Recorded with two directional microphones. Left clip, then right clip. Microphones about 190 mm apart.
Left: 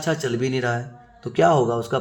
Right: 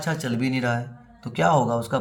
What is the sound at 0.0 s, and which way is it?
Speech, 25° left (ahead or behind).